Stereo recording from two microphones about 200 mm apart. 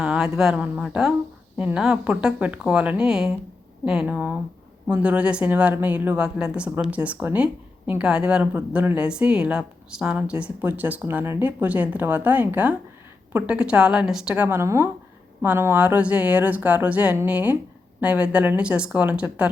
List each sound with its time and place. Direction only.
0.0 s speech: 5° right (ahead or behind)